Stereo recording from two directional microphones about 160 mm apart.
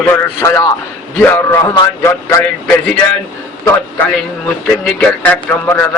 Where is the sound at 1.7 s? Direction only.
20° left (ahead or behind).